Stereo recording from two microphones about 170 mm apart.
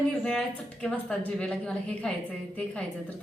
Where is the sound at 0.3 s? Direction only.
5° left (ahead or behind).